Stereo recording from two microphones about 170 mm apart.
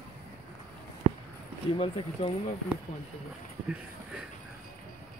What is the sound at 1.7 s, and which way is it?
Speech, 35° left (ahead or behind).